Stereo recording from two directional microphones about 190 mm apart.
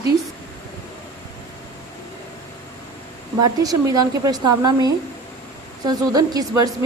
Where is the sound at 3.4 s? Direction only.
20° right (ahead or behind).